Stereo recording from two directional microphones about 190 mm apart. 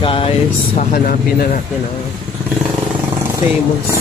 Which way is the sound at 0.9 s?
50° left (ahead or behind).